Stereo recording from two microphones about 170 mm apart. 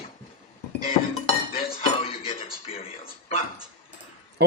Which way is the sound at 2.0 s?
35° left (ahead or behind).